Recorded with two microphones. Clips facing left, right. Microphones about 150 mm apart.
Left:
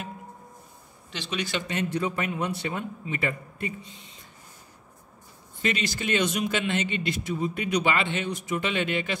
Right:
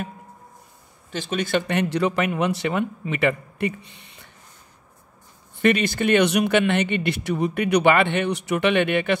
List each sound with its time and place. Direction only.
1.1 s speech: 50° right (ahead or behind); by 4.3 s 65° right (ahead or behind)
5.6 s speech: 60° right (ahead or behind)